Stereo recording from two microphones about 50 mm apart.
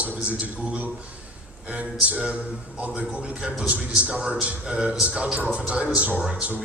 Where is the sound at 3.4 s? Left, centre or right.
Right.